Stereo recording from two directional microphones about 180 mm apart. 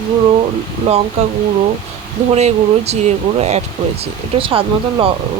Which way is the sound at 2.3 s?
35° right (ahead or behind).